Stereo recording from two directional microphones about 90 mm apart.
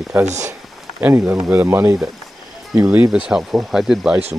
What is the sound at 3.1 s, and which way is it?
Speech, 10° right (ahead or behind).